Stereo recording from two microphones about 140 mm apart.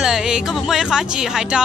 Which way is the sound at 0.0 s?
5° right (ahead or behind).